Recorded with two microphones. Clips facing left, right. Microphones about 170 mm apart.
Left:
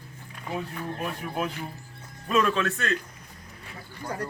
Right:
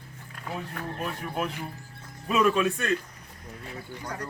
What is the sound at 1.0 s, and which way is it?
Speech, 5° left (ahead or behind).